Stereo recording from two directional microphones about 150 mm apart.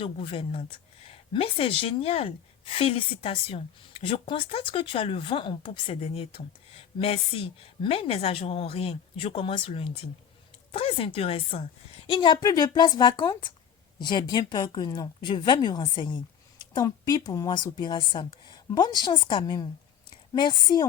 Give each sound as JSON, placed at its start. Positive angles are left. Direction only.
{"t": 0.0, "sound": "a woman's voice", "side_deg": 35}